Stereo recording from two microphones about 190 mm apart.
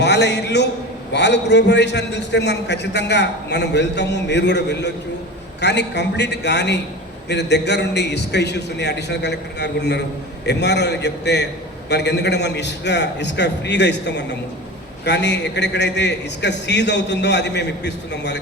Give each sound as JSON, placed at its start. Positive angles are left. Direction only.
{"t": 0.0, "sound": "a man's voice", "side_deg": 65}